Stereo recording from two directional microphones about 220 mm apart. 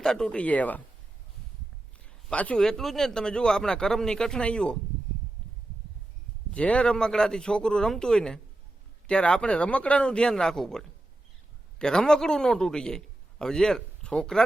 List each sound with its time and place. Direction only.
0.0 s speech: 5° left (ahead or behind)
2.3 s speech: 5° left (ahead or behind)
6.5 s speech: 5° left (ahead or behind)